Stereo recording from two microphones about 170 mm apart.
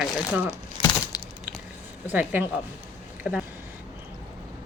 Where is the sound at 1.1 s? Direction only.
20° left (ahead or behind).